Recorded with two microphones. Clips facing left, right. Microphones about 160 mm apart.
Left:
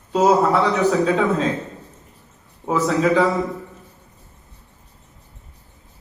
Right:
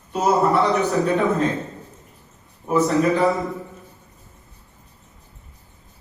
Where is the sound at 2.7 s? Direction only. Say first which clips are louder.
Even; 90° left.